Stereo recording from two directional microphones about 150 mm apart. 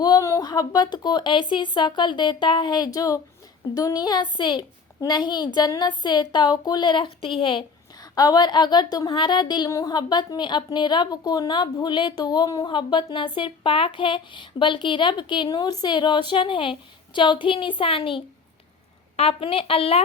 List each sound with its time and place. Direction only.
0.0 s a woman's voice: 25° left (ahead or behind); by 20.0 s 40° left (ahead or behind)